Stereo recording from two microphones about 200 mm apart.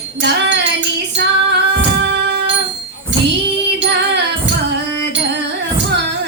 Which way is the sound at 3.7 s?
60° right (ahead or behind).